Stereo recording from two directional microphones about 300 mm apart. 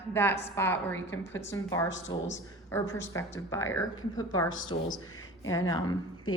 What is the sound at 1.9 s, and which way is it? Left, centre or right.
Speech, left.